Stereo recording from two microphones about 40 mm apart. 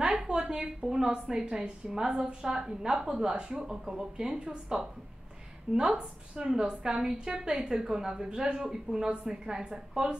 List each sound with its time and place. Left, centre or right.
0.0 s a sound: centre
0.4 s a woman's voice: centre
8.6 s a woman's voice: centre